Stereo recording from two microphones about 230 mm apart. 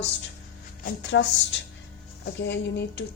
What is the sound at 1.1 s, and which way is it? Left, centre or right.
Speech, left.